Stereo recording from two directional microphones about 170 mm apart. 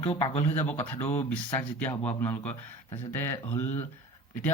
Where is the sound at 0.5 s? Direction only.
10° left (ahead or behind).